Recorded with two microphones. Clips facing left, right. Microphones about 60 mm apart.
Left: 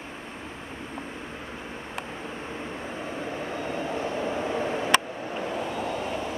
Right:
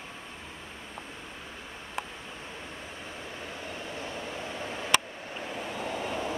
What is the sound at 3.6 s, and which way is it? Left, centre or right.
Vehicle, left.